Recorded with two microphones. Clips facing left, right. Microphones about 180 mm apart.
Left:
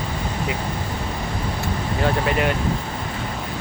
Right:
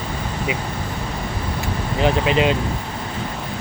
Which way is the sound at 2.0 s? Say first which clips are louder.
Right 4 dB; 20° right (ahead or behind).